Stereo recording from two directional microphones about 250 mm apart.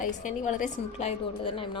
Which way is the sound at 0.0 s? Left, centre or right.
Left.